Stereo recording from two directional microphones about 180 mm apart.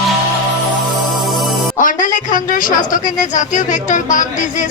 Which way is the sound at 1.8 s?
45° left (ahead or behind).